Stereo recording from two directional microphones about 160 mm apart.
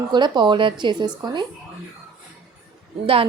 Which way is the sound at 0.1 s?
30° right (ahead or behind).